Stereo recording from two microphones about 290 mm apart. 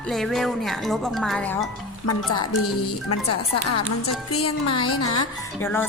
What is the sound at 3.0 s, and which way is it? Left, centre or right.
Speech, left.